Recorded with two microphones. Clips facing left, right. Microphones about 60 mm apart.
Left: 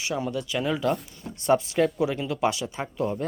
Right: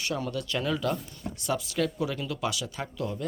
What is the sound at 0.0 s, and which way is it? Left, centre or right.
Speech, centre.